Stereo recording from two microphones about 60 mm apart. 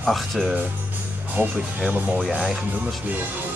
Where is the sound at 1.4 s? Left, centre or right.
Right.